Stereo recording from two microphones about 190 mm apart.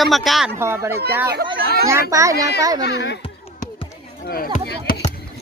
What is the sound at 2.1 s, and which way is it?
Speech, 15° right (ahead or behind).